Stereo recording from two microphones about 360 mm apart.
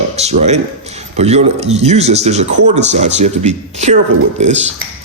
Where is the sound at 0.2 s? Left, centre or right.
Centre.